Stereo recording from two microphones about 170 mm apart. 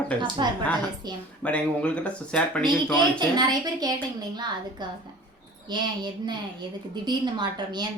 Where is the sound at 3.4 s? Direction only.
25° right (ahead or behind).